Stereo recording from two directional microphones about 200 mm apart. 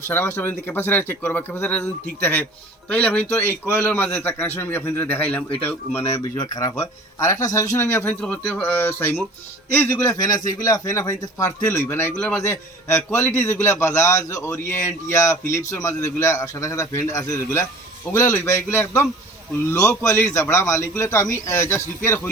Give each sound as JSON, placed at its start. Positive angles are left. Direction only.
{"t": 0.1, "sound": "a man's voice", "side_deg": 10}